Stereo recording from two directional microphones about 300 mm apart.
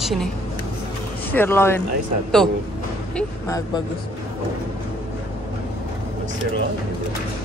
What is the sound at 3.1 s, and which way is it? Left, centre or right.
Speech, centre.